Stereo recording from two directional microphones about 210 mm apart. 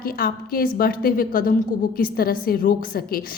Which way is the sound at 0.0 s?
45° left (ahead or behind).